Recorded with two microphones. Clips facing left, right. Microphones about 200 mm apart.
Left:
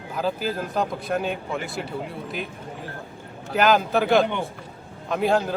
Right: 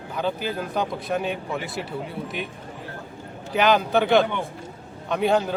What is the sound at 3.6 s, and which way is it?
Speech, centre (ahead or behind).